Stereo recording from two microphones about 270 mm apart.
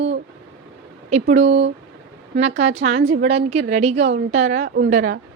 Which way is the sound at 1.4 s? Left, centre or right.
Right.